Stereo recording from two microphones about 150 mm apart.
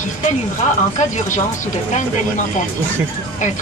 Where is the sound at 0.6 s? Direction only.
50° left (ahead or behind).